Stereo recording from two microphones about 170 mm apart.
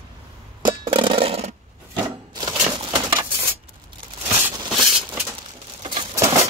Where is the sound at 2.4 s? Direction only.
25° right (ahead or behind).